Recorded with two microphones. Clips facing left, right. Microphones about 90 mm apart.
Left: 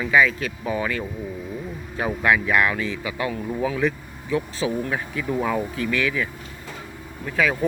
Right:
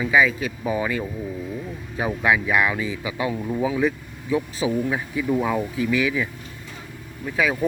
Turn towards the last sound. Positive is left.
turn(degrees=-15)  # may be behind; listen again after turning